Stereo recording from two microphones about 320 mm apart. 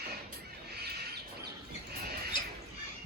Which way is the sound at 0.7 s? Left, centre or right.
Right.